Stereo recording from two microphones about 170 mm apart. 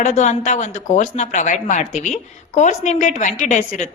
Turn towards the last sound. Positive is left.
turn(degrees=45)  # may be behind; listen again after turning